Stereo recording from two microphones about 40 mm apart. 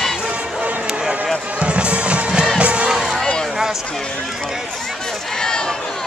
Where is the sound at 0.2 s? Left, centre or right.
Right.